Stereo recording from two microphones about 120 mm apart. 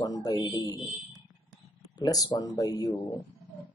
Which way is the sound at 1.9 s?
35° left (ahead or behind).